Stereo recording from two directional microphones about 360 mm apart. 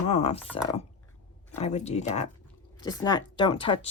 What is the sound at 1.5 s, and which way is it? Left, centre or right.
Speech, centre.